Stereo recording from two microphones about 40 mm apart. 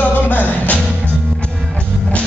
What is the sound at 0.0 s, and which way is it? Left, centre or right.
Music, left.